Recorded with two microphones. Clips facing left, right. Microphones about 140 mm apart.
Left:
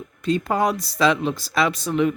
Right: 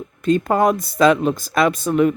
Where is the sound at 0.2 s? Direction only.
50° right (ahead or behind).